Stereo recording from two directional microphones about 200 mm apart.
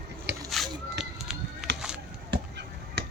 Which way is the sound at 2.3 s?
55° right (ahead or behind).